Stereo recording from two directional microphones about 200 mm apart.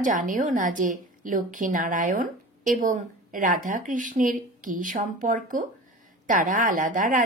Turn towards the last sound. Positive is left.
turn(degrees=-40)  # may be behind; listen again after turning